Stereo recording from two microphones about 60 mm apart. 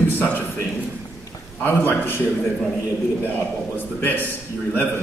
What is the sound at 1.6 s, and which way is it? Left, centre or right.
Speech, left.